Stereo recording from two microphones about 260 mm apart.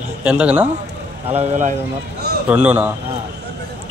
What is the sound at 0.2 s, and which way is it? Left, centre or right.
Speech, centre.